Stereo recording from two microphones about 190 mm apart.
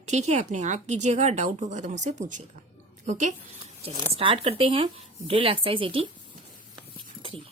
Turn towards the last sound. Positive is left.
turn(degrees=-30)  # may be behind; listen again after turning